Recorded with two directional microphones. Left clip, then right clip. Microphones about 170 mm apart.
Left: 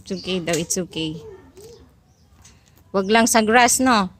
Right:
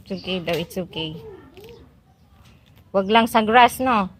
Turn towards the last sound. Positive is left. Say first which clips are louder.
# even
turn(degrees=50)  # may be behind; listen again after turning